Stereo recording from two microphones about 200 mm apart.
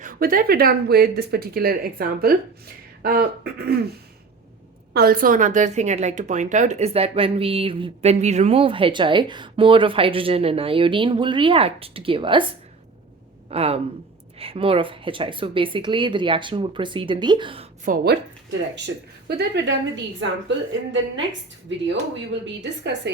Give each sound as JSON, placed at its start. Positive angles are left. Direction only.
{"t": 0.0, "sound": "speech", "side_deg": -45}
{"t": 4.9, "sound": "a woman's voice", "side_deg": -45}
{"t": 13.5, "sound": "a woman's voice", "side_deg": -30}
{"t": 17.8, "sound": "speech", "side_deg": -50}
{"t": 19.3, "sound": "a woman's voice", "side_deg": -60}
{"t": 22.3, "sound": "a woman's voice", "side_deg": -60}